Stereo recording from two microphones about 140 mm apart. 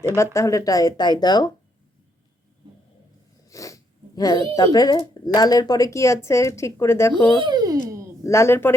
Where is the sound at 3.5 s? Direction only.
25° left (ahead or behind).